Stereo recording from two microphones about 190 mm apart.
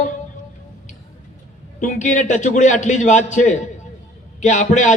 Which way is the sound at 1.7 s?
40° left (ahead or behind).